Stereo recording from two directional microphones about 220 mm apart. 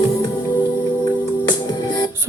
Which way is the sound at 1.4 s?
20° left (ahead or behind).